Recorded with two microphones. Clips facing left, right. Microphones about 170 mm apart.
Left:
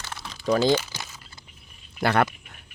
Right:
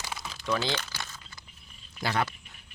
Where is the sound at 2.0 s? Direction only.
60° left (ahead or behind).